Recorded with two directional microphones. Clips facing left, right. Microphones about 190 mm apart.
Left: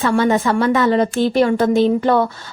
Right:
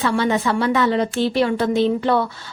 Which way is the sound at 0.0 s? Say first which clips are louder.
Left 3 dB; 45° left (ahead or behind).